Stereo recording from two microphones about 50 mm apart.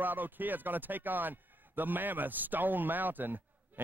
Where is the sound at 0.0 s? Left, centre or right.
Right.